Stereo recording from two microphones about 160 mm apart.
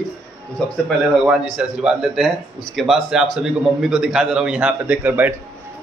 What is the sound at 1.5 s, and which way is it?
A man's voice, 5° right (ahead or behind).